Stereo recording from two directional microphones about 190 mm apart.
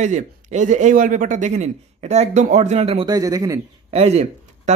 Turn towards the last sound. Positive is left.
turn(degrees=-35)  # may be behind; listen again after turning